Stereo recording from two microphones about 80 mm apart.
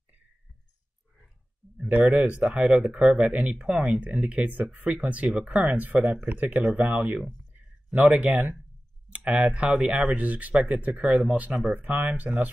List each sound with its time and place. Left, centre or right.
2.0 s speech: centre